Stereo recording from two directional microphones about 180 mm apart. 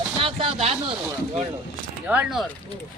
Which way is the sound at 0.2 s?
30° right (ahead or behind).